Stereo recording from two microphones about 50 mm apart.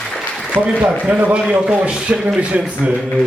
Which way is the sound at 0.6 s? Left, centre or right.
Right.